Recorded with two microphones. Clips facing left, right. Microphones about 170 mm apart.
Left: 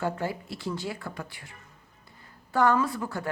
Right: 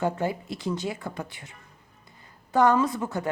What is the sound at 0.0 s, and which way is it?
A woman's voice, 20° right (ahead or behind).